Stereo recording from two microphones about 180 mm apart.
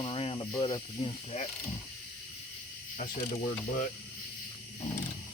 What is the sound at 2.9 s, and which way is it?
Speech, 45° left (ahead or behind).